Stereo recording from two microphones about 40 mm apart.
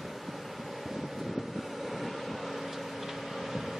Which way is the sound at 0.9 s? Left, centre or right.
Centre.